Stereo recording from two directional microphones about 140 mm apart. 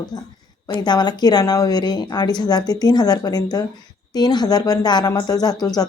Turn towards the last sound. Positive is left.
turn(degrees=25)  # may be behind; listen again after turning